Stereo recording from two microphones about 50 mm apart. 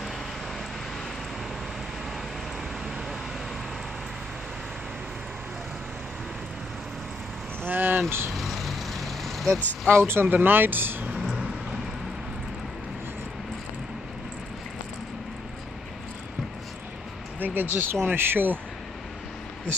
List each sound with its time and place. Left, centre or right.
7.6 s vehicle: right
8.4 s vehicle: centre
9.8 s speech: right
10.2 s speech: right
11.1 s vehicle: centre
17.4 s speech: right